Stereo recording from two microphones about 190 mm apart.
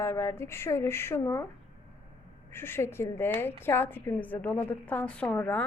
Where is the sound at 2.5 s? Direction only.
10° left (ahead or behind).